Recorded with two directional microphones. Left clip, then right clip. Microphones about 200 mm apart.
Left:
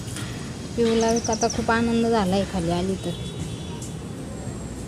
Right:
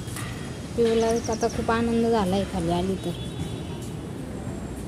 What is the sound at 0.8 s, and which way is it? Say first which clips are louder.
Speech: left 1 dB; 20° left (ahead or behind).